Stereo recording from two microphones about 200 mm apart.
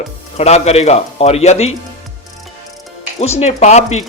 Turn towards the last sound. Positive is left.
turn(degrees=35)  # may be behind; listen again after turning